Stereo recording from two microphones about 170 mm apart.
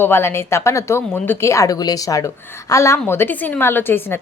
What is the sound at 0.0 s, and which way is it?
Speech, 15° left (ahead or behind).